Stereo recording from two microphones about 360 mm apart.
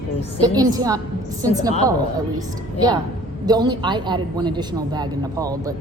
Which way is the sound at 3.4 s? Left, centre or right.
Centre.